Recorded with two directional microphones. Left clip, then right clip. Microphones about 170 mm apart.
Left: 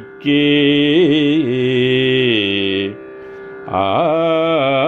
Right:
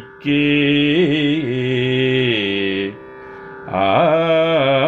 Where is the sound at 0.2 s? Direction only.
30° left (ahead or behind).